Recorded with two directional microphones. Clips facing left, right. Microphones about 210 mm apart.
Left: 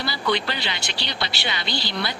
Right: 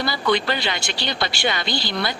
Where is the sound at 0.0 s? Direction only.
50° right (ahead or behind).